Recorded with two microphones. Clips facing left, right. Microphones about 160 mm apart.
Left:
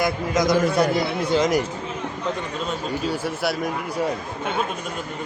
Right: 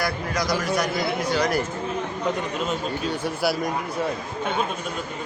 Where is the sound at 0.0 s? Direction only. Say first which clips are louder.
Left 5 dB; 20° left (ahead or behind).